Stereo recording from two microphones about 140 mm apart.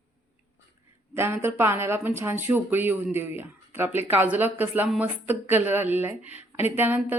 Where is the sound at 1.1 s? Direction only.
15° right (ahead or behind).